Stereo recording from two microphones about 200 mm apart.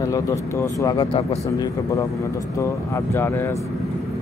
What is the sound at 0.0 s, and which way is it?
A man's voice, 15° left (ahead or behind).